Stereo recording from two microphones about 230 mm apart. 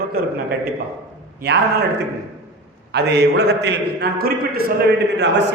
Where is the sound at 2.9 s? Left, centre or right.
Right.